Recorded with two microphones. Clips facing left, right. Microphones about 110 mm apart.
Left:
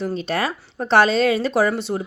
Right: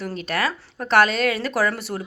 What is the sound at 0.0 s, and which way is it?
Speech, 30° left (ahead or behind).